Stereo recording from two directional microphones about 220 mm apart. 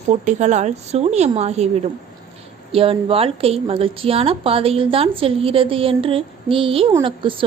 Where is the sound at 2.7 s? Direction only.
25° right (ahead or behind).